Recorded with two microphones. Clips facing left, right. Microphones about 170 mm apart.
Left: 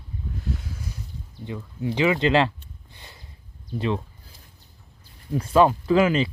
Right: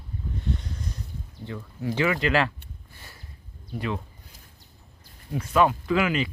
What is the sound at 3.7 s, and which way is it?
Speech, 25° left (ahead or behind).